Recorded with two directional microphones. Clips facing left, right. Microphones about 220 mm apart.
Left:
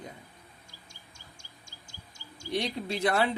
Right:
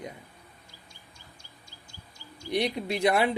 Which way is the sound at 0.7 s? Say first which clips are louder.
Right 1 dB; 45° left (ahead or behind).